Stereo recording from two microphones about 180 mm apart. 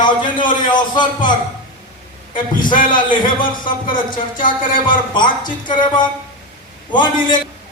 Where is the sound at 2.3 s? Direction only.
25° left (ahead or behind).